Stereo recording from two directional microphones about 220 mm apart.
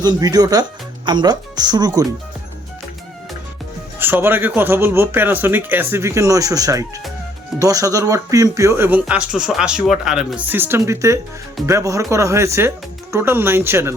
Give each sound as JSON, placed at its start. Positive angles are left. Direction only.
{"t": 0.0, "sound": "speech", "side_deg": -15}
{"t": 3.9, "sound": "speech", "side_deg": -10}